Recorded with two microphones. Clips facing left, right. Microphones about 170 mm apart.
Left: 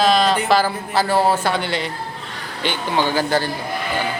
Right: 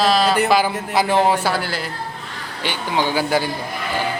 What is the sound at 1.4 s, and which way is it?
A man's voice, centre (ahead or behind).